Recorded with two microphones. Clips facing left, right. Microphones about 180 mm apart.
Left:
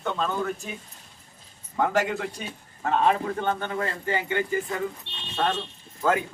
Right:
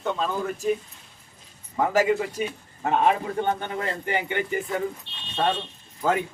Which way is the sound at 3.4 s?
15° right (ahead or behind).